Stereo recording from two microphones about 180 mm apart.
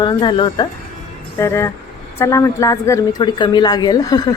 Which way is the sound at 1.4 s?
15° left (ahead or behind).